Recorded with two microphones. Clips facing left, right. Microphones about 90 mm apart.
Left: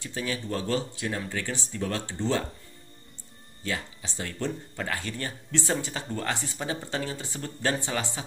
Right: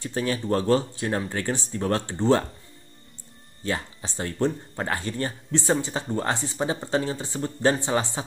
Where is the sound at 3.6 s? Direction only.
40° right (ahead or behind).